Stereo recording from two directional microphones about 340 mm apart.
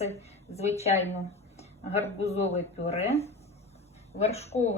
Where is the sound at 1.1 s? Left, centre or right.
Centre.